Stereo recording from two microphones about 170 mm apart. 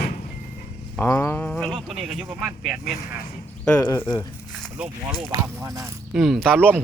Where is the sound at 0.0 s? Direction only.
65° left (ahead or behind).